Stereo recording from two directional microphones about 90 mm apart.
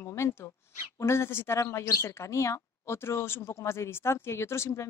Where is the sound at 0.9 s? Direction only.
30° left (ahead or behind).